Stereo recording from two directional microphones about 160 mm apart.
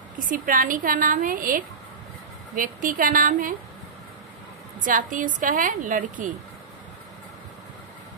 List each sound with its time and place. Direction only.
0.2 s a woman's voice: 55° right (ahead or behind)
4.8 s a woman's voice: 55° right (ahead or behind)